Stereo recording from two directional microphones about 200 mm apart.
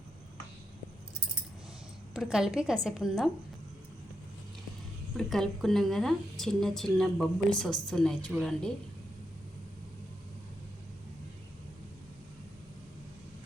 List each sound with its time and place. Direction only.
2.1 s a woman's voice: centre (ahead or behind)
5.1 s a woman's voice: centre (ahead or behind)